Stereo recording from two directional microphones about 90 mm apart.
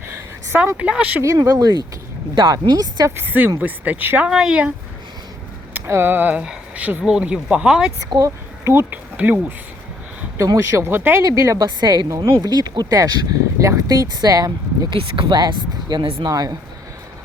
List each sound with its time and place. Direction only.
0.8 s speech: 15° right (ahead or behind)
1.2 s speech: 35° right (ahead or behind)
3.2 s speech: 20° right (ahead or behind)
4.3 s speech: 10° right (ahead or behind)
5.7 s speech: 25° right (ahead or behind); by 7.9 s 10° right (ahead or behind)
8.6 s speech: 25° right (ahead or behind)
10.3 s speech: 35° right (ahead or behind)
11.2 s speech: 35° right (ahead or behind)
11.6 s speech: 50° right (ahead or behind)
12.0 s speech: 35° right (ahead or behind)
12.4 s speech: 45° right (ahead or behind)
14.8 s speech: 70° right (ahead or behind)
16.3 s speech: 45° right (ahead or behind)